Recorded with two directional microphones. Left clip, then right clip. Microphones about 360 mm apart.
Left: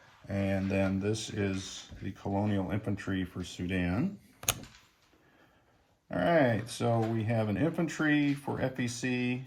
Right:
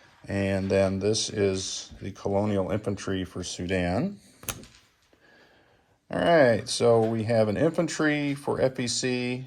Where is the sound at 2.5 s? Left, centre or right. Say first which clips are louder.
Right 7 dB; centre.